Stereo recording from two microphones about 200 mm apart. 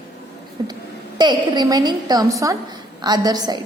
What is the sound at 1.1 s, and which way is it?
A woman's voice, 20° right (ahead or behind).